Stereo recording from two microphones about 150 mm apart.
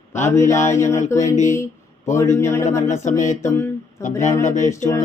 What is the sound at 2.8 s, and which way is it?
Speech, 50° left (ahead or behind).